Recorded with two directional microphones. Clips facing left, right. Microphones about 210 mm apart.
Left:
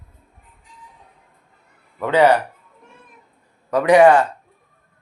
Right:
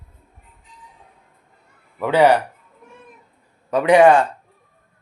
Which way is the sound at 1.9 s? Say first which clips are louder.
Even; 10° right (ahead or behind).